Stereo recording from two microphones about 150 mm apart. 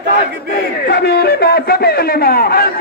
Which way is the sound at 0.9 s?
90° left.